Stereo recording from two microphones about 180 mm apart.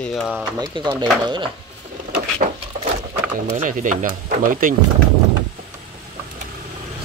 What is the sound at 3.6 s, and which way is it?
Speech, 45° right (ahead or behind).